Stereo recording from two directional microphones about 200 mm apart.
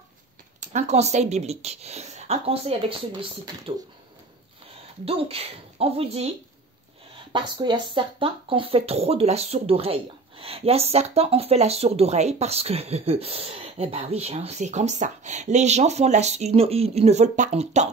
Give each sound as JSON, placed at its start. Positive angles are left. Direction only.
{"t": 0.6, "sound": "speech", "side_deg": -35}
{"t": 5.0, "sound": "speech", "side_deg": -30}
{"t": 7.3, "sound": "speech", "side_deg": -25}